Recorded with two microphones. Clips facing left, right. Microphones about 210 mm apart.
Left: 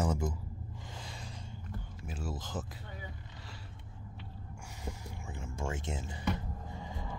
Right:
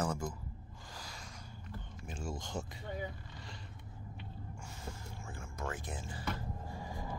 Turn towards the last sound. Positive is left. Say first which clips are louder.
# even
turn(degrees=20)  # may be behind; listen again after turning